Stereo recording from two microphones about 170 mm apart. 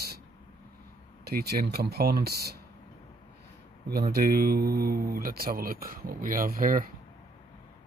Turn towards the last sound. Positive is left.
turn(degrees=-55)  # may be behind; listen again after turning